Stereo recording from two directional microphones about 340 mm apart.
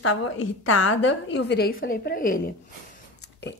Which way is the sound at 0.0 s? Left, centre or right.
Left.